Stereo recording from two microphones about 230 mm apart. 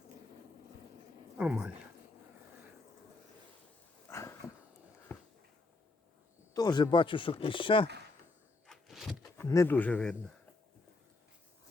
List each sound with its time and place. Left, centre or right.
1.4 s speech: centre
4.1 s dog: centre
6.5 s speech: centre
8.6 s power windows: centre
9.2 s speech: centre